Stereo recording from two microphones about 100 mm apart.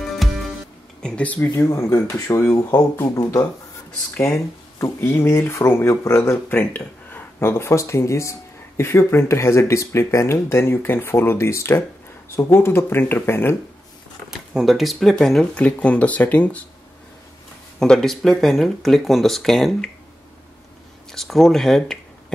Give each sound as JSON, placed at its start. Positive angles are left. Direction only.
{"t": 0.2, "sound": "music", "side_deg": 0}
{"t": 1.0, "sound": "speech", "side_deg": 15}
{"t": 1.6, "sound": "speech", "side_deg": 35}
{"t": 14.5, "sound": "speech", "side_deg": -5}
{"t": 17.7, "sound": "speech", "side_deg": 5}
{"t": 21.1, "sound": "speech", "side_deg": 5}